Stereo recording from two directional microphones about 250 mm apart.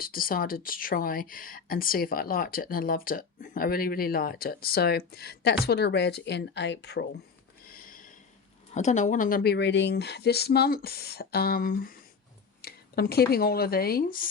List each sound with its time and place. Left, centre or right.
0.0 s speech: left
7.7 s a sound: left
8.7 s speech: left